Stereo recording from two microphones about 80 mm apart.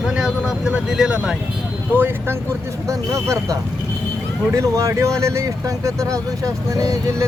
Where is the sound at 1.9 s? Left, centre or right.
Right.